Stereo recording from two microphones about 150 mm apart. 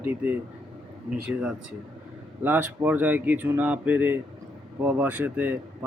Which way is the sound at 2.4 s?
10° right (ahead or behind).